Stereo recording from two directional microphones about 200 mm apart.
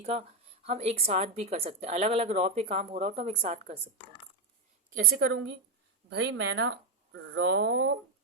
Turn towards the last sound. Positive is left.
turn(degrees=-60)  # may be behind; listen again after turning